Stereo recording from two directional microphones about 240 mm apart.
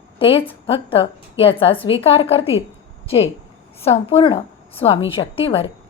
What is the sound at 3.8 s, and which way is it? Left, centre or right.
A woman's voice, left.